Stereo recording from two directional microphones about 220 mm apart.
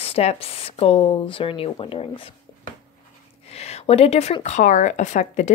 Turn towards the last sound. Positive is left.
turn(degrees=35)  # may be behind; listen again after turning